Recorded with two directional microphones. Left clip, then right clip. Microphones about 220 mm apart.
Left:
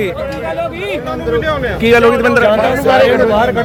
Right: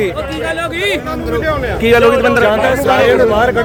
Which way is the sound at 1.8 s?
Centre (ahead or behind).